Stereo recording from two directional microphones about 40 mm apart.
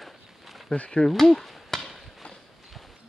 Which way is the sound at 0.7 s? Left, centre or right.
Left.